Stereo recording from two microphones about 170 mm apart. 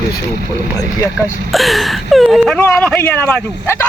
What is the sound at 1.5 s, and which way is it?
Speech, centre (ahead or behind).